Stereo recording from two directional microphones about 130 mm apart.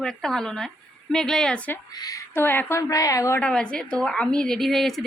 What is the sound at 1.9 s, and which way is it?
Speech, 30° left (ahead or behind).